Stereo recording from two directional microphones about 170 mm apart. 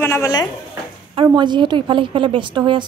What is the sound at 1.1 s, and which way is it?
A woman's voice, 25° right (ahead or behind).